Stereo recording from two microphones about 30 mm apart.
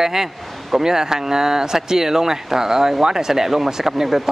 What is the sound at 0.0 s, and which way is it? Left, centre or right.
Speech, centre.